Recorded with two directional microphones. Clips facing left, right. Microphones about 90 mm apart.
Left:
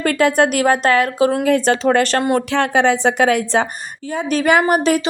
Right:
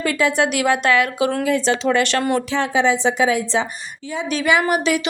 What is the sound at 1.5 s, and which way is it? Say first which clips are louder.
Speech: left 4 dB; 50° left (ahead or behind).